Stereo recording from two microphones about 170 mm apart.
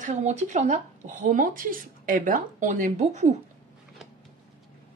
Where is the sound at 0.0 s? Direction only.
45° right (ahead or behind).